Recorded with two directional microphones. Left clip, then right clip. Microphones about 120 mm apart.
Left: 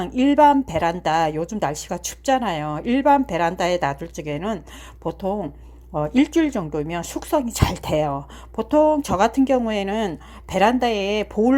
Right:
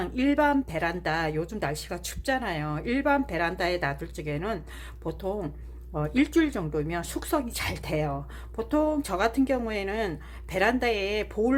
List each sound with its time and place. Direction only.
0.0 s a woman's voice: 40° left (ahead or behind)
7.4 s a woman's voice: 45° left (ahead or behind)